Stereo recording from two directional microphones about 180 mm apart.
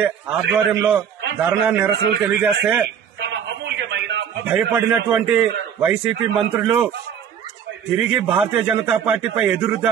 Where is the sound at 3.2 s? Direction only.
70° right (ahead or behind).